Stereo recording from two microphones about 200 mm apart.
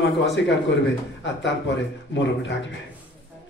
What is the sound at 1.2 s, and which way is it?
Speech, 65° left (ahead or behind).